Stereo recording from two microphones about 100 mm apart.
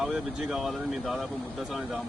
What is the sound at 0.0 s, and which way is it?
Speech, 5° right (ahead or behind).